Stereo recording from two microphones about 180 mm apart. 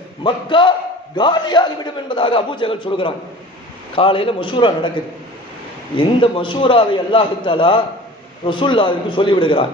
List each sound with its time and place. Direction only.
0.2 s a man's voice: 25° left (ahead or behind)
5.9 s a man's voice: 30° left (ahead or behind)